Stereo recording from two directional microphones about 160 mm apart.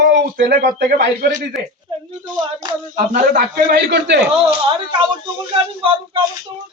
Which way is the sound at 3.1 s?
65° right (ahead or behind).